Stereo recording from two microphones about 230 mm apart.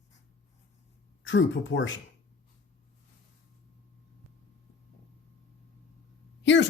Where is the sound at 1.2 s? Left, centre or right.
Left.